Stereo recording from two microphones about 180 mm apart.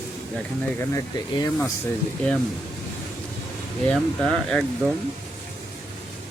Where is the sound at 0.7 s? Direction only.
15° left (ahead or behind).